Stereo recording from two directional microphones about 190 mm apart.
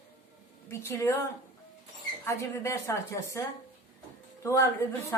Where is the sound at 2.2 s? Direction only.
15° left (ahead or behind).